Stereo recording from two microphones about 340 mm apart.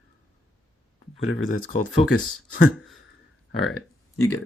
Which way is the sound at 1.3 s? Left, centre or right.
Left.